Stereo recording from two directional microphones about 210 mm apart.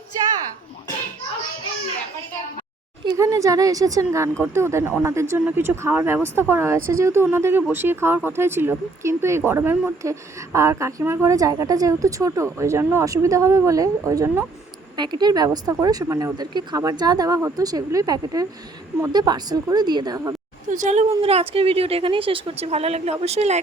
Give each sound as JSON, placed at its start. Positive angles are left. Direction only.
{"t": 3.0, "sound": "a woman's voice", "side_deg": -20}
{"t": 20.7, "sound": "a woman's voice", "side_deg": -35}